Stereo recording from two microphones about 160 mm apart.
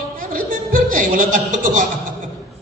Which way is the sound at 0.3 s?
60° right (ahead or behind).